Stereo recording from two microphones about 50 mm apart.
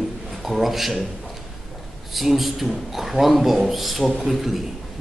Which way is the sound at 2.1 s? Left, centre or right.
Centre.